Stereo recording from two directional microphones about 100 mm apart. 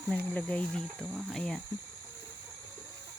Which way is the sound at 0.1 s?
10° left (ahead or behind).